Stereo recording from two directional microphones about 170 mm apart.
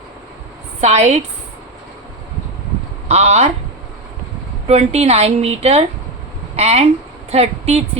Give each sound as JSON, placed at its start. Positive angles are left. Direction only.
{"t": 0.8, "sound": "a woman's voice", "side_deg": -40}
{"t": 3.1, "sound": "a woman's voice", "side_deg": -40}
{"t": 4.6, "sound": "a woman's voice", "side_deg": -40}